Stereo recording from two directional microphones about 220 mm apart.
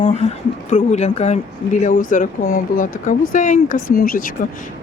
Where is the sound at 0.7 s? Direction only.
35° left (ahead or behind).